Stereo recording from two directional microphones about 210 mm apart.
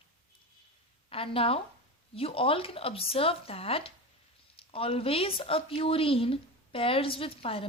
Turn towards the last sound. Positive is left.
turn(degrees=25)  # may be behind; listen again after turning